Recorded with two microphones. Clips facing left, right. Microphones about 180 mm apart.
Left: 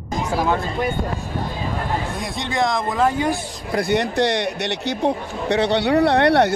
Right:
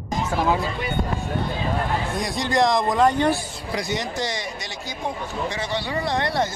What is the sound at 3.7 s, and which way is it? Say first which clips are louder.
Speech: left 7 dB; 60° left (ahead or behind).